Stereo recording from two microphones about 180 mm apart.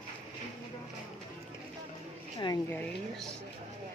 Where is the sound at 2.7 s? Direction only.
5° left (ahead or behind).